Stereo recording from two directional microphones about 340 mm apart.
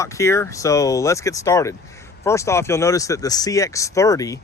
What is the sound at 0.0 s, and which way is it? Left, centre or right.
Speech, centre.